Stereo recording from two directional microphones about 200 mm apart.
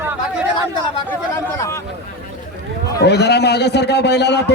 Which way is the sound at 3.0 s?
55° left (ahead or behind).